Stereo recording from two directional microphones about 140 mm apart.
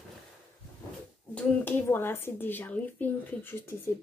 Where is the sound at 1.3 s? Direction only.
15° left (ahead or behind).